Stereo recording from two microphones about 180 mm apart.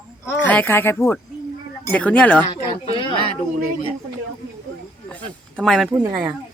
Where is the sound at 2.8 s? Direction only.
30° left (ahead or behind).